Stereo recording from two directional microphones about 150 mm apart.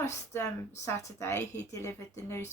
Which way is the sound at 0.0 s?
20° left (ahead or behind).